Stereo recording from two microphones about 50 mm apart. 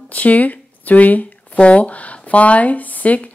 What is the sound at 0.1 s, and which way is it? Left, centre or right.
Shuffling cards, left.